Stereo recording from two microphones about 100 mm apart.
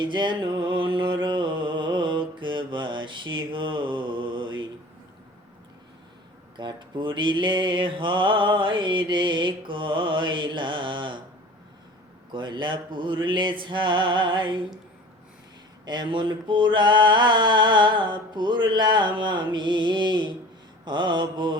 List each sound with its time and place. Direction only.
0.0 s music: 50° right (ahead or behind)
6.6 s mantra: 50° right (ahead or behind)
12.3 s mantra: 50° right (ahead or behind)
15.9 s mantra: 50° right (ahead or behind)